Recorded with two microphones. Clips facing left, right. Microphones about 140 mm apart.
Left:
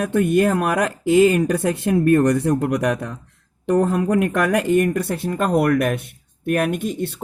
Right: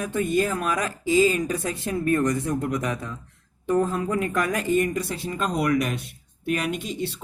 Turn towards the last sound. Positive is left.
turn(degrees=50)  # may be behind; listen again after turning